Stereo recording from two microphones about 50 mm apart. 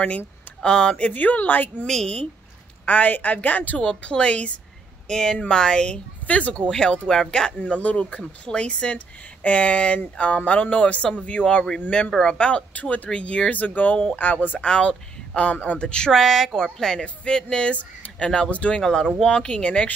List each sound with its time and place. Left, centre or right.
0.6 s speech: centre
1.1 s a woman's voice: left
6.2 s speech: left
7.6 s speech: left; by 12.4 s centre
12.4 s a woman's voice: left
14.6 s speech: left
16.1 s speech: centre; by 18.8 s left
18.8 s speech: centre